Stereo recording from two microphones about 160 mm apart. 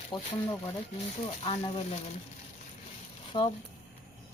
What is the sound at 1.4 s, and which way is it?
Speech, 35° left (ahead or behind).